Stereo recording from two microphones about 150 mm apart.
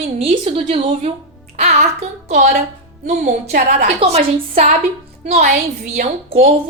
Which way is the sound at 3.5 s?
75° right (ahead or behind).